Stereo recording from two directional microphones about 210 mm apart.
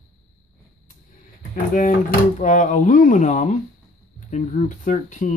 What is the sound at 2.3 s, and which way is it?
Speech, 35° left (ahead or behind).